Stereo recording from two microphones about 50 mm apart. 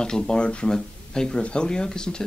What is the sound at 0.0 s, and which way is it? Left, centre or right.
Speech, centre.